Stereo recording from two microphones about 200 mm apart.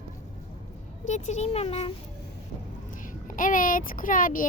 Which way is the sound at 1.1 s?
35° left (ahead or behind).